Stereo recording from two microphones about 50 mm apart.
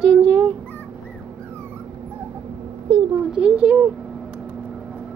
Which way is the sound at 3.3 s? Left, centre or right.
Right.